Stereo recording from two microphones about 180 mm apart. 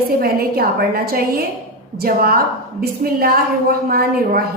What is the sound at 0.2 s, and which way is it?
A woman's voice, 55° right (ahead or behind).